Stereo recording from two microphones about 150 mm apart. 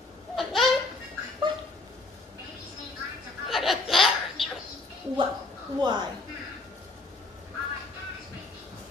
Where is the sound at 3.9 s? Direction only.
Centre (ahead or behind).